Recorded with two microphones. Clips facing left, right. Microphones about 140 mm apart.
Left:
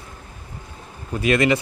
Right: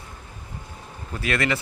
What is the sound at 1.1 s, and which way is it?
Speech, 20° left (ahead or behind).